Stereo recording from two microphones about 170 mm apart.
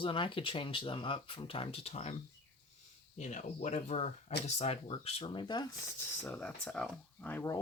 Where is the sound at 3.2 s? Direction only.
45° left (ahead or behind); by 5.7 s 25° left (ahead or behind).